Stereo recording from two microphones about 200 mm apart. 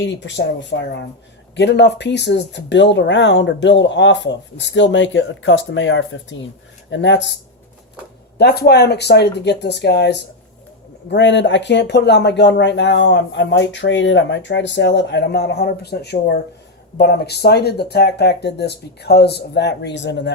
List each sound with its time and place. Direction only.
0.0 s speech: 65° left (ahead or behind)
8.4 s speech: 55° left (ahead or behind)